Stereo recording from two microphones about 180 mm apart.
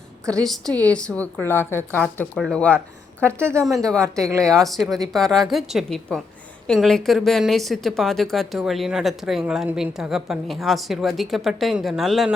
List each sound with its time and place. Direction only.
0.3 s a woman's voice: 5° left (ahead or behind)
2.7 s speech: 15° right (ahead or behind)
4.6 s a woman's voice: centre (ahead or behind)